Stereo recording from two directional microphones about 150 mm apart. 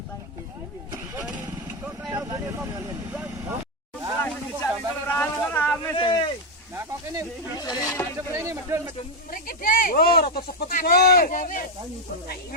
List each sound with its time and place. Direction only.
2.1 s vehicle: 25° right (ahead or behind)
4.2 s a sound: 15° left (ahead or behind)
5.9 s a sound: 30° left (ahead or behind)
7.6 s speech: 25° left (ahead or behind)
8.3 s speech: 20° right (ahead or behind)
9.3 s speech: 70° left (ahead or behind)